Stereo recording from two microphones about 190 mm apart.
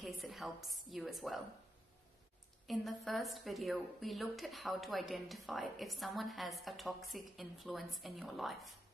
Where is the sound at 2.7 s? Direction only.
Centre (ahead or behind).